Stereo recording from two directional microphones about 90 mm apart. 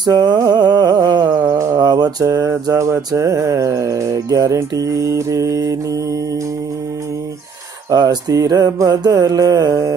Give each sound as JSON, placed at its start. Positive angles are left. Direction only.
{"t": 0.0, "sound": "speech", "side_deg": -50}
{"t": 0.6, "sound": "music", "side_deg": -50}
{"t": 1.8, "sound": "mantra", "side_deg": -55}
{"t": 2.7, "sound": "music", "side_deg": -30}
{"t": 7.9, "sound": "speech", "side_deg": -50}
{"t": 8.7, "sound": "music", "side_deg": -40}